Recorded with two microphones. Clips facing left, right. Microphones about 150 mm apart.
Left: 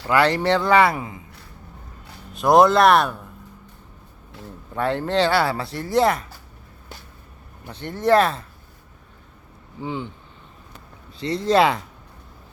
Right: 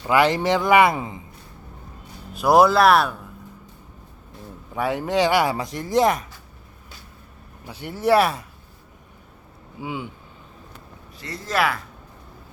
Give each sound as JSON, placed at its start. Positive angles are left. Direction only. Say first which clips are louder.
{"t": 0.1, "sound": "speech", "louder": "even", "side_deg": -15}
{"t": 2.3, "sound": "speech", "louder": "left 1 dB", "side_deg": -5}
{"t": 4.7, "sound": "speech", "louder": "left 1 dB", "side_deg": -10}
{"t": 7.7, "sound": "speech", "louder": "left 1 dB", "side_deg": -10}
{"t": 9.8, "sound": "speech", "louder": "left 2 dB", "side_deg": -10}
{"t": 11.2, "sound": "speech", "louder": "left 6 dB", "side_deg": 25}